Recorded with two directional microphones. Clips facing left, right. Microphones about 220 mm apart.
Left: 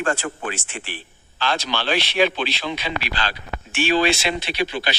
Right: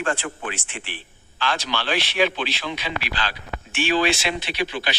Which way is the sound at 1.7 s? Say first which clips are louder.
Left 2 dB; 30° left (ahead or behind).